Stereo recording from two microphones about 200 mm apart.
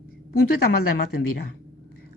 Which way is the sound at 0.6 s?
50° left (ahead or behind).